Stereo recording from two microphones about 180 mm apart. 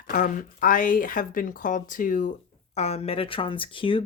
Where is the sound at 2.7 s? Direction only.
35° left (ahead or behind).